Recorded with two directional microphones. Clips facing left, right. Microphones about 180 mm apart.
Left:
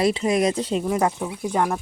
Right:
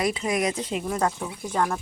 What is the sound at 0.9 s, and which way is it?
Speech, 15° left (ahead or behind).